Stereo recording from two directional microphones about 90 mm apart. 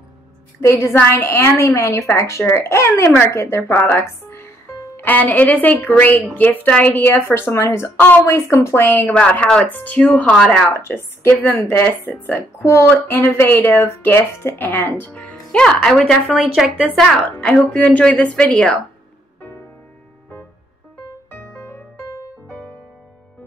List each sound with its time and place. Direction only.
0.6 s a woman's voice: 30° left (ahead or behind); by 10.7 s 5° left (ahead or behind)
10.7 s speech: 25° left (ahead or behind); by 16.9 s 10° right (ahead or behind)
16.9 s speech: 5° left (ahead or behind)
22.5 s music: 20° left (ahead or behind)